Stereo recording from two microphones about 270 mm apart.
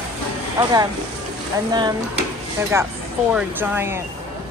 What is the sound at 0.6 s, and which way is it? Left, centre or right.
Speech, centre.